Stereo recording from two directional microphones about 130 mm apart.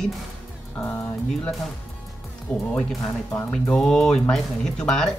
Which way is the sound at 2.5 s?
10° left (ahead or behind).